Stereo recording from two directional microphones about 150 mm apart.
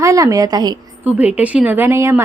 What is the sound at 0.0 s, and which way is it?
Speech, 20° right (ahead or behind).